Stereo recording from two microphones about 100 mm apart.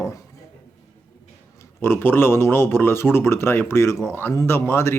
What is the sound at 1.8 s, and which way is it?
Speech, 20° left (ahead or behind).